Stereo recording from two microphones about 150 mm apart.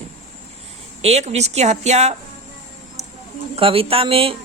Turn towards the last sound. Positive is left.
turn(degrees=-40)  # may be behind; listen again after turning